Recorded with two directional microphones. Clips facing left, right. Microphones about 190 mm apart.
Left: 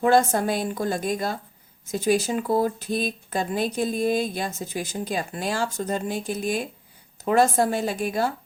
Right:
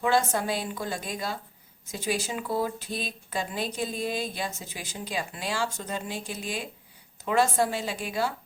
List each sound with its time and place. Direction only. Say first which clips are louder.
0.0 s speech: left 6 dB; 45° left (ahead or behind)